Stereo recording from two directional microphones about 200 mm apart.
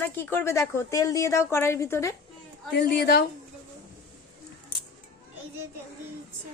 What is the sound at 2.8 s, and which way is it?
Speech, 55° left (ahead or behind).